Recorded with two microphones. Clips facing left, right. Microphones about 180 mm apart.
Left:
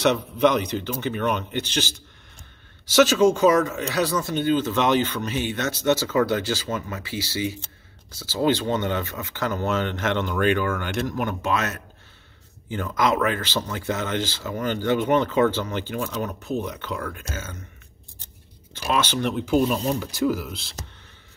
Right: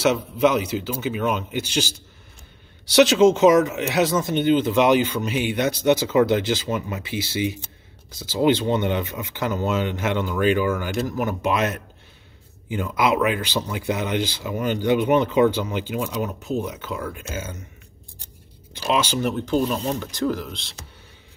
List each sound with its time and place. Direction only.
0.0 s speech: 5° right (ahead or behind)
3.0 s speech: 20° right (ahead or behind); by 11.3 s 5° right (ahead or behind)
11.4 s speech: 15° right (ahead or behind)
18.2 s a sound: 15° right (ahead or behind)
19.4 s speech: 10° left (ahead or behind)